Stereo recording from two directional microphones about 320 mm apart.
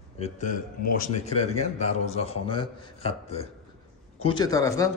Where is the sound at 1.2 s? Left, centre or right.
Centre.